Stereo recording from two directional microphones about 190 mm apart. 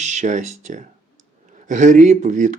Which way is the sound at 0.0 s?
40° right (ahead or behind).